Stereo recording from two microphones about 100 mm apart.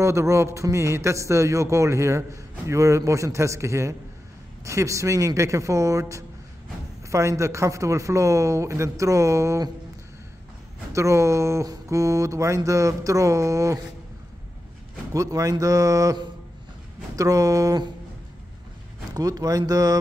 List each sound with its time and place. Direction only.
0.0 s speech: 30° right (ahead or behind)
10.9 s speech: 30° right (ahead or behind)
15.1 s speech: 35° right (ahead or behind)
19.1 s speech: 40° right (ahead or behind)